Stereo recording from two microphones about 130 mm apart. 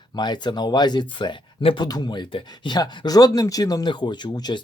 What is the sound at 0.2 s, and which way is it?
Speech, 35° left (ahead or behind).